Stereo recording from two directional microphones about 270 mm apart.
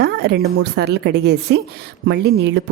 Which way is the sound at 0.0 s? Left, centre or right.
Right.